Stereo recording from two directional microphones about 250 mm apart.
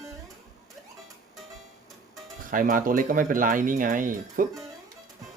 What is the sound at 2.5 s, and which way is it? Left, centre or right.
Speech, right.